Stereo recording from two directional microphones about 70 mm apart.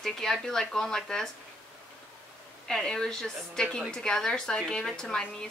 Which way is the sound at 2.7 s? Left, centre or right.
Centre.